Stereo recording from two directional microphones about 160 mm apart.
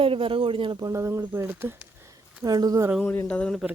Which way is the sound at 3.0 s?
15° left (ahead or behind).